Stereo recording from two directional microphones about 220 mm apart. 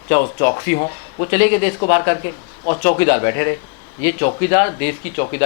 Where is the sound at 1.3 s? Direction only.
15° left (ahead or behind).